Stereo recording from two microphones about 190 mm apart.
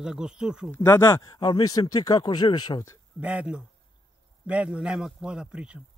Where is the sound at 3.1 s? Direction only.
5° right (ahead or behind).